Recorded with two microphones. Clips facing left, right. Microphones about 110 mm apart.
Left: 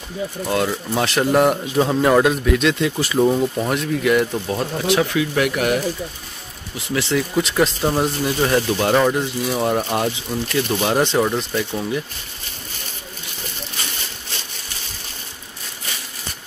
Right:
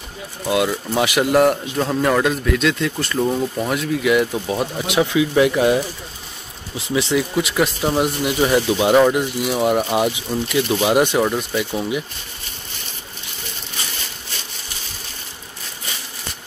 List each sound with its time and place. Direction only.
0.5 s speech: 5° right (ahead or behind)
4.8 s speech: 15° right (ahead or behind)
6.8 s speech: 20° right (ahead or behind)
7.3 s speech: 5° right (ahead or behind)